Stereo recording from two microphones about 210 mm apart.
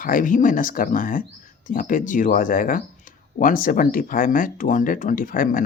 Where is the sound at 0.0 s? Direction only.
40° left (ahead or behind).